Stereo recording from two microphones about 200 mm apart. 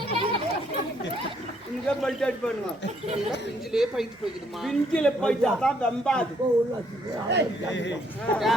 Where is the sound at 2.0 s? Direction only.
Centre (ahead or behind).